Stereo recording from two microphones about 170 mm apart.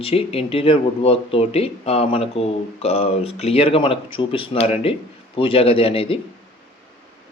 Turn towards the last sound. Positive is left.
turn(degrees=35)  # may be behind; listen again after turning